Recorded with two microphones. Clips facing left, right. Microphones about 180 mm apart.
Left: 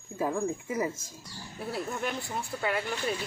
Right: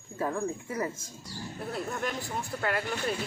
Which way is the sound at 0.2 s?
10° left (ahead or behind).